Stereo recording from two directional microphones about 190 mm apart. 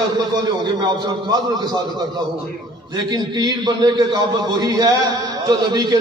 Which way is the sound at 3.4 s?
20° right (ahead or behind).